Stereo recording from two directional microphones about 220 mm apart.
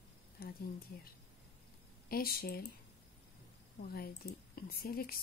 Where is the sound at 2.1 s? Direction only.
45° left (ahead or behind).